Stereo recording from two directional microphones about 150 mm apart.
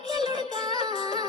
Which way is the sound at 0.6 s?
25° right (ahead or behind).